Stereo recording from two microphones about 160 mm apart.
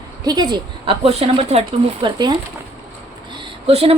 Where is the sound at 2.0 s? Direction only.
25° right (ahead or behind).